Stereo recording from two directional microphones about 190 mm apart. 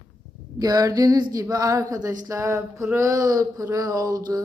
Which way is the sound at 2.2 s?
15° right (ahead or behind).